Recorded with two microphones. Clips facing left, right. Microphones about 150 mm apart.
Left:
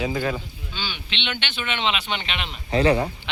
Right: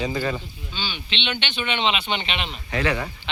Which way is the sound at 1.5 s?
Centre (ahead or behind).